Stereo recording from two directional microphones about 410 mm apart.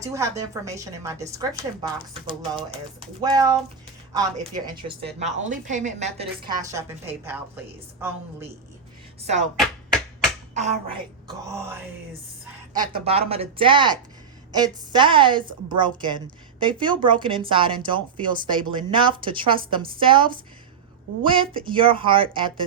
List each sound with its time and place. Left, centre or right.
0.0 s a woman's voice: centre
9.2 s a woman's voice: centre
10.5 s a woman's voice: centre